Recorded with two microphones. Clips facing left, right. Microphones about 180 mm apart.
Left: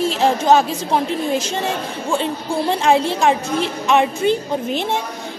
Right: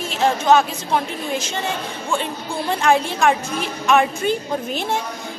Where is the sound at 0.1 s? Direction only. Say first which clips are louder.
Right 2 dB; 30° left (ahead or behind).